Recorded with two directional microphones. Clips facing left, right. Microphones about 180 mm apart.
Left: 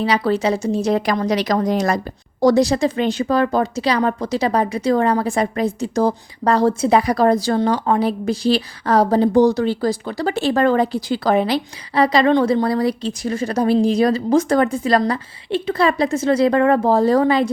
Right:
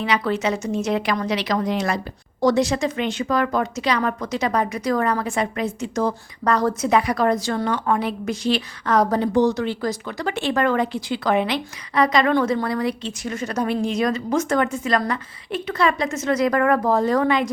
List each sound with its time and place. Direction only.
0.0 s a woman's voice: 35° left (ahead or behind)